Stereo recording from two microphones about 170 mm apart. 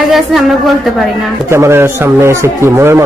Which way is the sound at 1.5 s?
15° right (ahead or behind).